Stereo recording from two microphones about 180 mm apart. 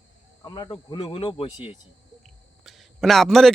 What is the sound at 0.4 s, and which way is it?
Speech, 25° left (ahead or behind).